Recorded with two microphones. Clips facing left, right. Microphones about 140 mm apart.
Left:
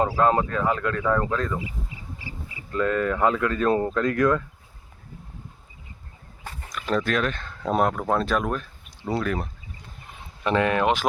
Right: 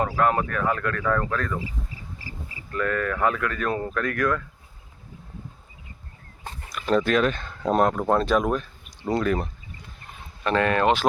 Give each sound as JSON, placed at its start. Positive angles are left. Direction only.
{"t": 0.2, "sound": "speech", "side_deg": 25}
{"t": 2.1, "sound": "a sound", "side_deg": -40}
{"t": 2.7, "sound": "speech", "side_deg": 20}
{"t": 6.7, "sound": "speech", "side_deg": -5}
{"t": 10.4, "sound": "speech", "side_deg": 15}